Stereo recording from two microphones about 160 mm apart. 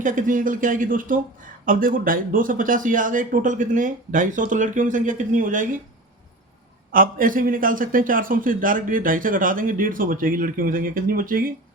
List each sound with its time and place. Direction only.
0.0 s a man's voice: 55° right (ahead or behind)
6.9 s a man's voice: 60° right (ahead or behind)